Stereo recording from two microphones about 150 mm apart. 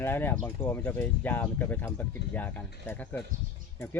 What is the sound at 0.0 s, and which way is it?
Speech, 15° left (ahead or behind).